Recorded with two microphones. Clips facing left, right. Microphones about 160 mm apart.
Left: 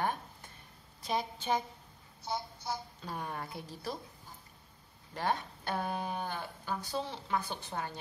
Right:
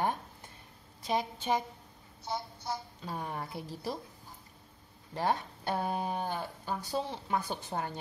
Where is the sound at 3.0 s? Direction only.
25° right (ahead or behind).